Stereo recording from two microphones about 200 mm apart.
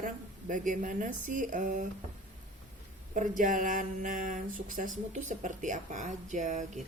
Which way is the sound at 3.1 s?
40° right (ahead or behind).